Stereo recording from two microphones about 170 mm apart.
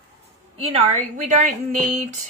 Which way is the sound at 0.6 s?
35° right (ahead or behind).